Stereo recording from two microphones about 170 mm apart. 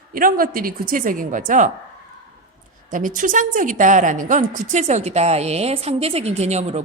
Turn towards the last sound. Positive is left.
turn(degrees=-40)  # may be behind; listen again after turning